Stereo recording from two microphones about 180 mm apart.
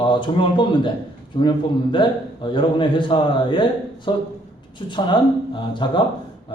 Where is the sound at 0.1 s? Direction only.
25° left (ahead or behind).